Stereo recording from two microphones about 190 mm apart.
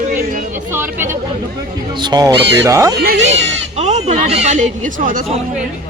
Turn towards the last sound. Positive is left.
turn(degrees=-45)  # may be behind; listen again after turning